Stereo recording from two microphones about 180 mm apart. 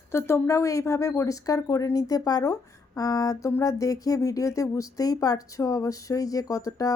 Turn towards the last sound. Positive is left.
turn(degrees=20)  # may be behind; listen again after turning